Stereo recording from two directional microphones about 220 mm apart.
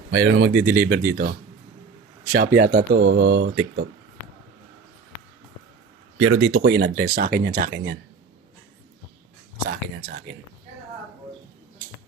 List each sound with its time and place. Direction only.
0.1 s speech: 50° right (ahead or behind)
2.3 s speech: 40° right (ahead or behind)
6.1 s speech: 70° right (ahead or behind); by 7.9 s 40° right (ahead or behind)
9.6 s speech: 45° right (ahead or behind)